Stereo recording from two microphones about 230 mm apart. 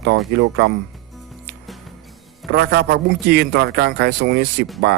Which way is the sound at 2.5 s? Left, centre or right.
Right.